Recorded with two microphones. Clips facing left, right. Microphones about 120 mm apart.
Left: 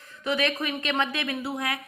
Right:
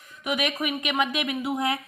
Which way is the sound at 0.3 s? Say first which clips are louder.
Even; 15° right (ahead or behind).